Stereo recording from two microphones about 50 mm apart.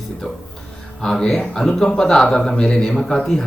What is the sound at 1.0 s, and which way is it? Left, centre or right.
Speech, centre.